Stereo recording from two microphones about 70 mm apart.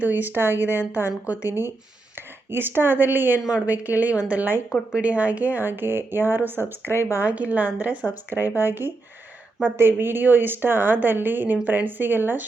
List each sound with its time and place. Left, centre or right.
0.0 s speech: right
6.8 s speech: left
7.3 s speech: right